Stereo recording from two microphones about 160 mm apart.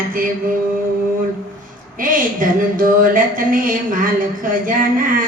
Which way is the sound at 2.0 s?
60° right (ahead or behind).